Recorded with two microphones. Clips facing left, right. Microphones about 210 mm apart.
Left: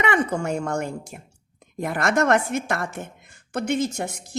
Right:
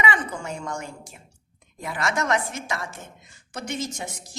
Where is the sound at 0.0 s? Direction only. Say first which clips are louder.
Left 5 dB; 60° left (ahead or behind).